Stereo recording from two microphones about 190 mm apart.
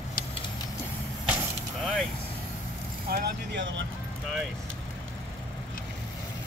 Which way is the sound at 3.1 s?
70° right (ahead or behind).